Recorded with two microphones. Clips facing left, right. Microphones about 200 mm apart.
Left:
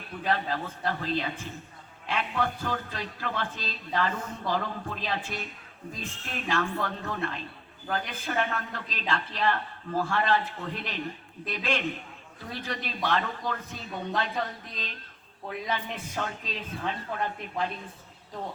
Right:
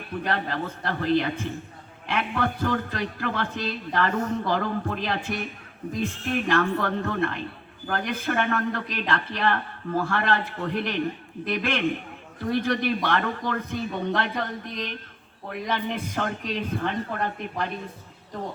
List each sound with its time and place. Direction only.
0.3 s a man's voice: 65° right (ahead or behind)